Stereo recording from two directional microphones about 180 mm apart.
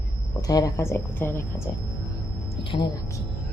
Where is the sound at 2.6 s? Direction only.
30° left (ahead or behind).